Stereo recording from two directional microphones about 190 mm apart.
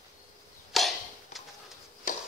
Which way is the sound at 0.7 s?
Centre (ahead or behind).